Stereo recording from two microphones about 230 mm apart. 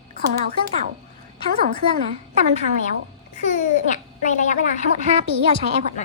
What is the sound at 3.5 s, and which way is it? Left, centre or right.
A woman's voice, left.